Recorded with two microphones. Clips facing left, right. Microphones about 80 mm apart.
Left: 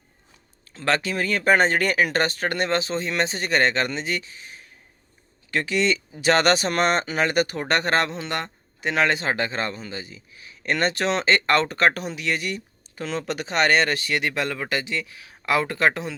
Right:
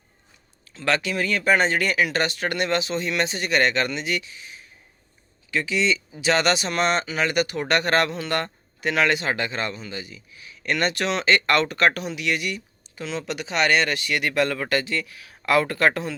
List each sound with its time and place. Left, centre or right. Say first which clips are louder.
0.6 s speech: even; left; by 16.1 s centre